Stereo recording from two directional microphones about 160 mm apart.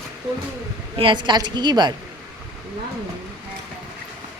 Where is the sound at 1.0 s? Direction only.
30° right (ahead or behind).